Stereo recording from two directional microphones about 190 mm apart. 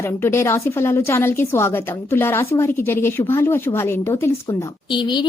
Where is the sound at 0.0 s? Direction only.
15° left (ahead or behind).